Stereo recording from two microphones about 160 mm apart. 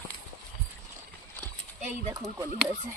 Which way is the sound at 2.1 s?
20° right (ahead or behind).